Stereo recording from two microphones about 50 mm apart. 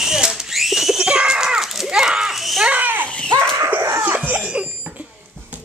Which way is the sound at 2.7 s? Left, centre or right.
Right.